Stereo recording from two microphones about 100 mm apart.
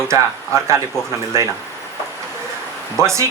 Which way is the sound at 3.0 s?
30° right (ahead or behind).